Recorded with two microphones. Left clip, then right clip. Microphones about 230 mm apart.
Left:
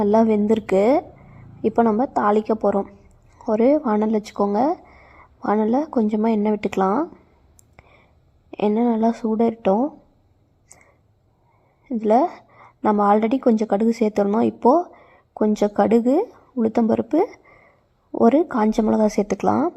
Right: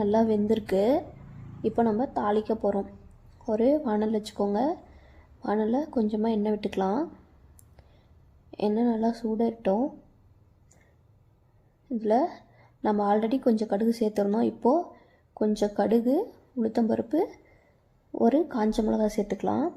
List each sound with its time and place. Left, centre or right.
0.0 s speech: left
8.4 s speech: left
11.9 s a woman's voice: left